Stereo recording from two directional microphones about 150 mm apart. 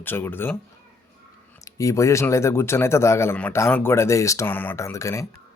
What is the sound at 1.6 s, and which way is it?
Speech, 20° left (ahead or behind).